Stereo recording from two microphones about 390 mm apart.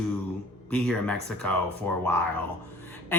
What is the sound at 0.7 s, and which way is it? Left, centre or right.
Speech, centre.